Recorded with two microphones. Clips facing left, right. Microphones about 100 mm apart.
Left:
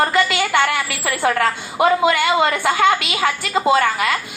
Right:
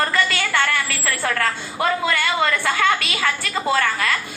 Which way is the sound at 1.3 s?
30° left (ahead or behind).